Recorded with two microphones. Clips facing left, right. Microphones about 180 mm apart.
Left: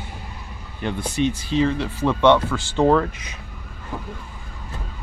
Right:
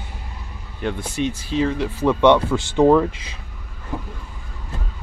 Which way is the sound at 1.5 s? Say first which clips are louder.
Even; 5° right (ahead or behind).